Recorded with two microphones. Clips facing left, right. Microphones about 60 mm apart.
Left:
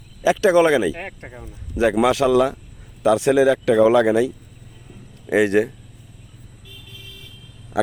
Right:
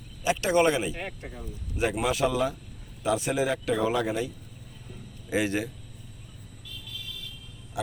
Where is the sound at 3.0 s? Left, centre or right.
Left.